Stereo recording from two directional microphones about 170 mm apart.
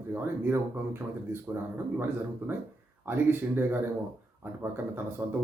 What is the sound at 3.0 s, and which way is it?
Speech, 10° right (ahead or behind).